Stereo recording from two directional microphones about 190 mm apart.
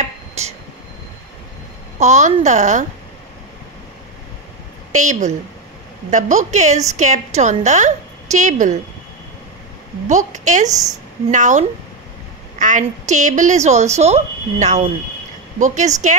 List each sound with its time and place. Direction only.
0.4 s speech: 35° right (ahead or behind)
2.0 s a woman's voice: 40° right (ahead or behind)
4.9 s a woman's voice: 40° right (ahead or behind)
10.0 s a woman's voice: 40° right (ahead or behind)
12.5 s a sound: 40° right (ahead or behind)
13.1 s a woman's voice: 40° right (ahead or behind)